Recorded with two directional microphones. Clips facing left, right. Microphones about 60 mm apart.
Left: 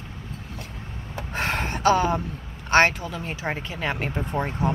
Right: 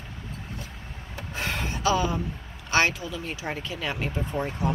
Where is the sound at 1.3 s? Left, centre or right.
Left.